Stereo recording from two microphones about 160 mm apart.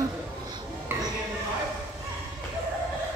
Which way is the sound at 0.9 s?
15° right (ahead or behind).